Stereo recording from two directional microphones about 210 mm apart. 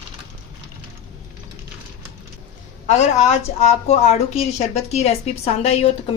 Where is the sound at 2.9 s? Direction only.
35° left (ahead or behind).